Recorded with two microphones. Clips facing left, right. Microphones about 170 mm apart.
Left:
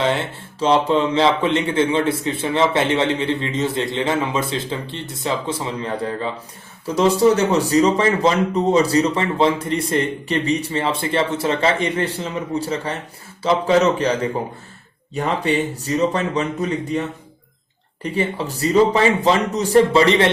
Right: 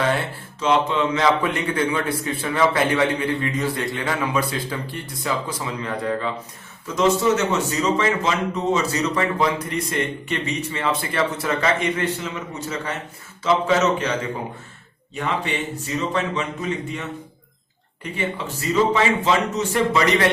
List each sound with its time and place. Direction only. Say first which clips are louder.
0.6 s a man's voice: left 3 dB; 30° left (ahead or behind)
18.0 s speech: left 5 dB; 35° left (ahead or behind)